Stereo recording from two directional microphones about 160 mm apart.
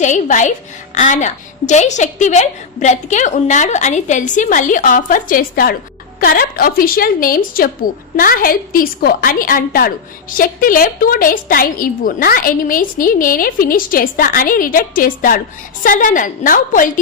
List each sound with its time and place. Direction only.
0.0 s a woman's voice: 50° left (ahead or behind)